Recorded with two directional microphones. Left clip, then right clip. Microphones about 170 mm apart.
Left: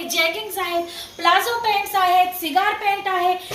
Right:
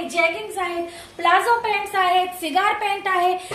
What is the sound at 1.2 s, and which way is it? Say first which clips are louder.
A woman's voice: right 1 dB; 60° right (ahead or behind).